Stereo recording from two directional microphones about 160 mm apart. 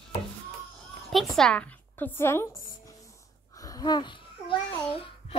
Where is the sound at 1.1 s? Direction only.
Centre (ahead or behind); by 5.1 s 35° left (ahead or behind).